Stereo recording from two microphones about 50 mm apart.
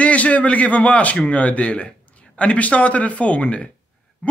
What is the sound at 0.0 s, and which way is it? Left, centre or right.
A man's voice, left.